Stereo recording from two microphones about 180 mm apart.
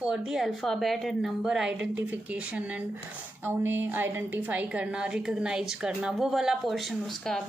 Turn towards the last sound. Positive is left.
turn(degrees=0)  # may be behind; listen again after turning